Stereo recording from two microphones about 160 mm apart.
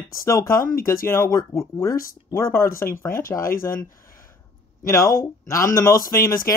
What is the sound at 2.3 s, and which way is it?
Speech, 15° left (ahead or behind).